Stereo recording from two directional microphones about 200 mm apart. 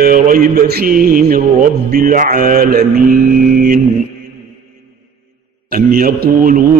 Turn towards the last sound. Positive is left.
turn(degrees=-45)  # may be behind; listen again after turning